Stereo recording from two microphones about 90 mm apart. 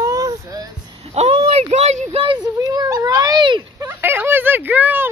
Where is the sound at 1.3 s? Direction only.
90° right.